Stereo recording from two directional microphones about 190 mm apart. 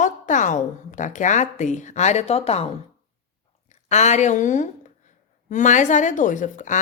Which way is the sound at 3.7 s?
35° left (ahead or behind).